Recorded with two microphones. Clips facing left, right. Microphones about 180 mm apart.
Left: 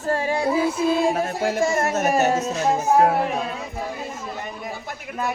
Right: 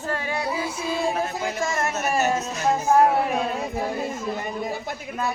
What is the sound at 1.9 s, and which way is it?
Music, 45° left (ahead or behind).